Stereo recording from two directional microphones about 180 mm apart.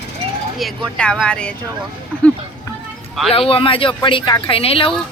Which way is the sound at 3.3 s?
30° left (ahead or behind).